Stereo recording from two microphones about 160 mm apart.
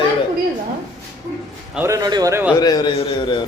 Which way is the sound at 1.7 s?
15° right (ahead or behind).